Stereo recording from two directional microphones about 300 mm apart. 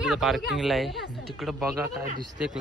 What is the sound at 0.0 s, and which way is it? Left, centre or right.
Speech, centre.